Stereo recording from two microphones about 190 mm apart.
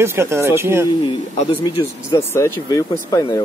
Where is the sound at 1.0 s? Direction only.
25° left (ahead or behind).